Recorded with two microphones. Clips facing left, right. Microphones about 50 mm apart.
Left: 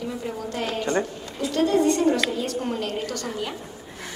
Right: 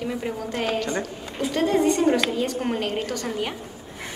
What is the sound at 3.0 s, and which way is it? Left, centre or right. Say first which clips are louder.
Child singing: right 1 dB; centre.